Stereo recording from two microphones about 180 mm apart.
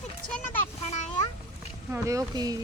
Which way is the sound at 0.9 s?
40° left (ahead or behind).